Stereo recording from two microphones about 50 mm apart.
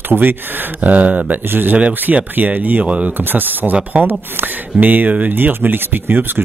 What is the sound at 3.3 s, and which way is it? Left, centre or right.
Speech, right.